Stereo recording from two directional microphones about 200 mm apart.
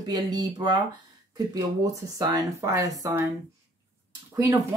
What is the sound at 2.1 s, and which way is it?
Speech, 20° right (ahead or behind).